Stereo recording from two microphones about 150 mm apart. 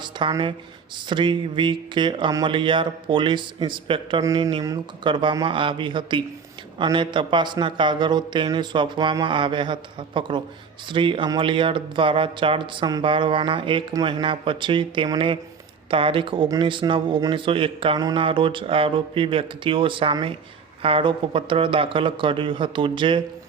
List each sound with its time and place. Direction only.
0.0 s speech: 30° right (ahead or behind)
4.2 s speech: 25° right (ahead or behind)